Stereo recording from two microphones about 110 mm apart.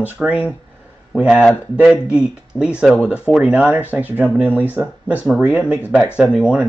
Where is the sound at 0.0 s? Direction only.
10° right (ahead or behind).